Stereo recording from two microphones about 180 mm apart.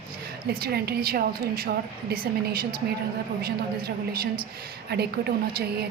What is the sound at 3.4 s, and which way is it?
A woman's voice, 60° right (ahead or behind).